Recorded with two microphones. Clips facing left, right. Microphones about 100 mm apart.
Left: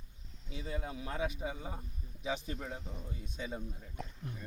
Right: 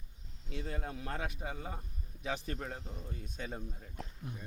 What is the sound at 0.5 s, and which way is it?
Speech, 5° left (ahead or behind).